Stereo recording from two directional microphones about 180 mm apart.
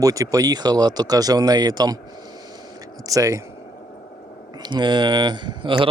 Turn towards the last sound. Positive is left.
turn(degrees=-25)  # may be behind; listen again after turning